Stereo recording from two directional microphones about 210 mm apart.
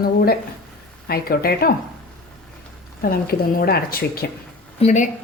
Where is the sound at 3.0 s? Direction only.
45° left (ahead or behind).